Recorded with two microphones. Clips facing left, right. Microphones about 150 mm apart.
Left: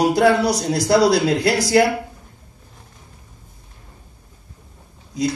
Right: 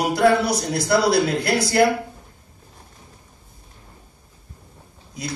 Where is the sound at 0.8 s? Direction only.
90° left.